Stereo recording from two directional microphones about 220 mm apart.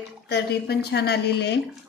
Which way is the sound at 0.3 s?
50° left (ahead or behind).